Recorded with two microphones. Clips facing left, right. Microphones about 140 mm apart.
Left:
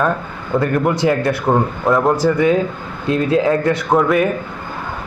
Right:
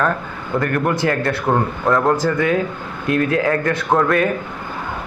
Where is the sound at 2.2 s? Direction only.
20° left (ahead or behind).